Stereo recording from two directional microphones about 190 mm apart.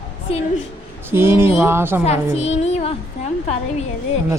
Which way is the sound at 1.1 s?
10° right (ahead or behind).